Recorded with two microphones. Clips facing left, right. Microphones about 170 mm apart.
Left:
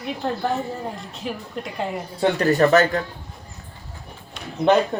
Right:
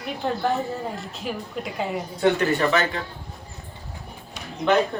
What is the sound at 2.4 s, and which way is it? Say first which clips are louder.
Speech: left 5 dB; 40° left (ahead or behind).